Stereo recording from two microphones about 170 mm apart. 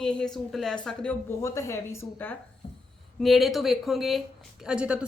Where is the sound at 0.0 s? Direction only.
5° left (ahead or behind).